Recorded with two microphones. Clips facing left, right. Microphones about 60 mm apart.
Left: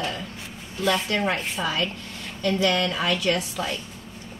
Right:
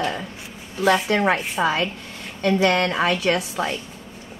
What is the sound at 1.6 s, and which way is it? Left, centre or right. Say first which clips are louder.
A woman's voice: right 5 dB; right.